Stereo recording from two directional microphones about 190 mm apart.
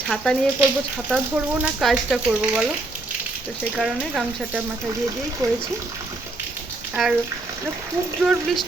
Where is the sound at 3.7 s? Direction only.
5° right (ahead or behind).